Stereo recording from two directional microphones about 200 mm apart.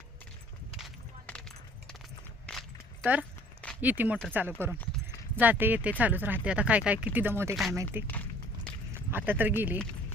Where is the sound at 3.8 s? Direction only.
10° right (ahead or behind).